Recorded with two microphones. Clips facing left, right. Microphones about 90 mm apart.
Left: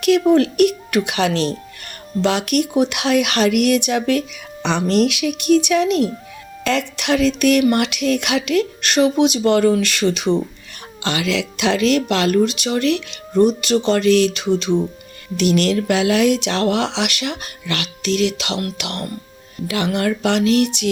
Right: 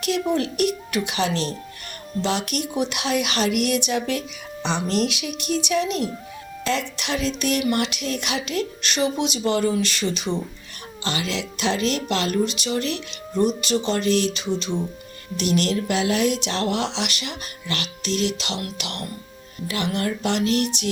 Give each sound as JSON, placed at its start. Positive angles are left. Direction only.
{"t": 0.0, "sound": "speech", "side_deg": 60}
{"t": 11.0, "sound": "speech", "side_deg": 80}
{"t": 19.6, "sound": "speech", "side_deg": 70}